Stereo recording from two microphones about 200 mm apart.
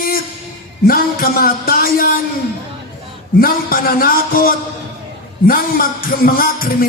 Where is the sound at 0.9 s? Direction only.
45° left (ahead or behind).